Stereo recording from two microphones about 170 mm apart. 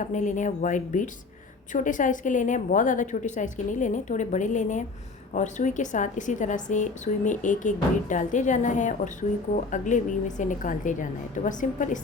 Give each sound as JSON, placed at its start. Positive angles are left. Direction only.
{"t": 0.0, "sound": "a woman's voice", "side_deg": 50}